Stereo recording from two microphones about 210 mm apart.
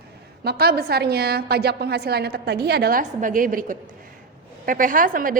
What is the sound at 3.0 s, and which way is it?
Mantra, 40° right (ahead or behind).